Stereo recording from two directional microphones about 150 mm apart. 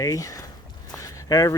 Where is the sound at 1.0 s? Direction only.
20° left (ahead or behind).